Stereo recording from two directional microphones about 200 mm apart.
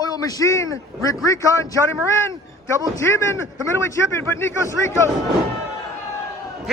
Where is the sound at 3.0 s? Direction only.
15° left (ahead or behind).